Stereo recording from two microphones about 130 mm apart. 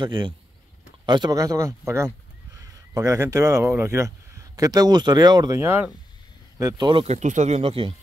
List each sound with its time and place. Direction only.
0.0 s speech: 40° right (ahead or behind)
5.6 s speech: 15° right (ahead or behind)
6.6 s speech: 40° right (ahead or behind)
7.1 s speech: 65° right (ahead or behind); by 7.9 s 50° right (ahead or behind)